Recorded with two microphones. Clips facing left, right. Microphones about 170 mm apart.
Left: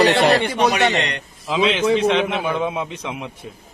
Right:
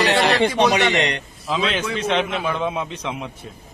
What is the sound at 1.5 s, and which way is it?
A man's voice, 10° left (ahead or behind).